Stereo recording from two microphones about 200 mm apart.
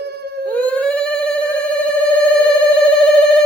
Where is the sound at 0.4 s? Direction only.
5° left (ahead or behind).